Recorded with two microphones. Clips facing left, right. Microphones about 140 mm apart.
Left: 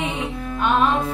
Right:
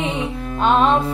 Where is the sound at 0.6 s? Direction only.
30° right (ahead or behind).